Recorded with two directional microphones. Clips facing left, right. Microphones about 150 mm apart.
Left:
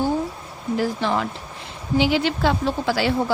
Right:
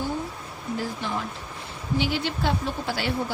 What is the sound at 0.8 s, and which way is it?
A woman's voice, 90° left.